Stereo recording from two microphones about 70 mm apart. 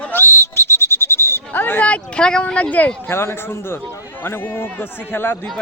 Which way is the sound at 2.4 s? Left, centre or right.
Left.